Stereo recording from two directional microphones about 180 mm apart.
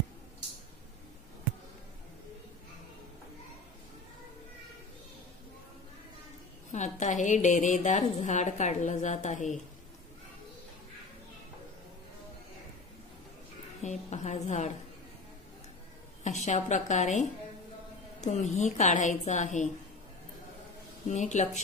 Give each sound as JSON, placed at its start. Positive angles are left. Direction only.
{"t": 6.7, "sound": "a woman's voice", "side_deg": 40}
{"t": 13.8, "sound": "a woman's voice", "side_deg": 40}
{"t": 16.3, "sound": "a woman's voice", "side_deg": 40}
{"t": 21.1, "sound": "a woman's voice", "side_deg": 40}